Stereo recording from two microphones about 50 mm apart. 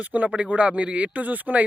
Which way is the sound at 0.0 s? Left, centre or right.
Right.